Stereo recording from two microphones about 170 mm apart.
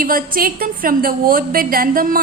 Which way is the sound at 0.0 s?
55° right (ahead or behind).